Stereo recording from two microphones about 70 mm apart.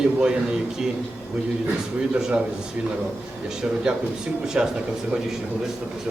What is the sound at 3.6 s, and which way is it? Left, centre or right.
A man's voice, centre.